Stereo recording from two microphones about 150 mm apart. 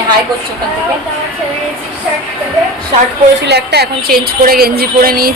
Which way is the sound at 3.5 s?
90° right.